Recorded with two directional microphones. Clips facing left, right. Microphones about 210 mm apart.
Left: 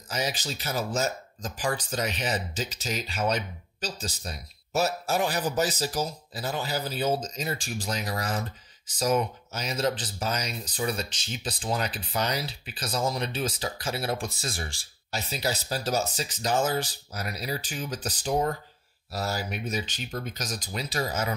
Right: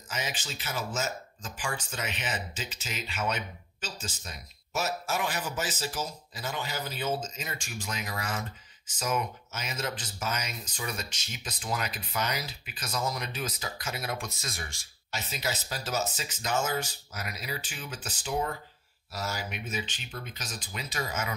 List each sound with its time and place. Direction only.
0.1 s speech: 40° left (ahead or behind)